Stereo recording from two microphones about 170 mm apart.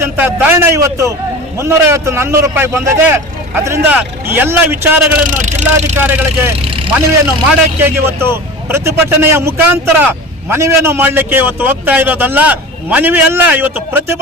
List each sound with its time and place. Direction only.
0.0 s a man's voice: 15° right (ahead or behind)
5.3 s speech: 45° right (ahead or behind)
6.0 s a man's voice: 10° right (ahead or behind)
6.7 s vehicle: 35° right (ahead or behind)
7.8 s a man's voice: 15° right (ahead or behind)